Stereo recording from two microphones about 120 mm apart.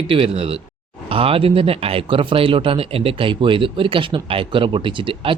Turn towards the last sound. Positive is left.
turn(degrees=-45)  # may be behind; listen again after turning